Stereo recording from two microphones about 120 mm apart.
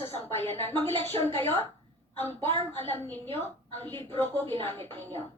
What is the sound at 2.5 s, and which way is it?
Speech, 50° right (ahead or behind).